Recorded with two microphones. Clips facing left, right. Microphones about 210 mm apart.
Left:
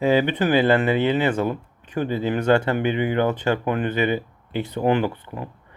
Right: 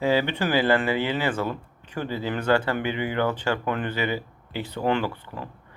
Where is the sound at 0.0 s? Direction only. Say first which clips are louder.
Left 4 dB; 20° left (ahead or behind).